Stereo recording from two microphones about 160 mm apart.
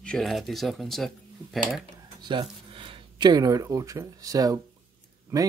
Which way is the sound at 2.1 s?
30° right (ahead or behind).